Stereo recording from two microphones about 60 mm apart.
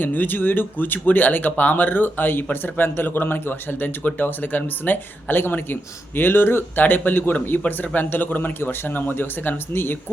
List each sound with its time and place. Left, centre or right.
0.0 s speech: left